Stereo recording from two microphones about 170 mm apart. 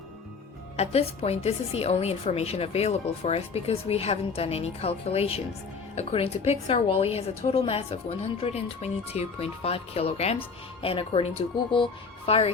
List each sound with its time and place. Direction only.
0.8 s a woman's voice: 40° left (ahead or behind)